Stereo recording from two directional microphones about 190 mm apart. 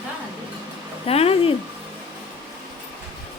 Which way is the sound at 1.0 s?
30° left (ahead or behind).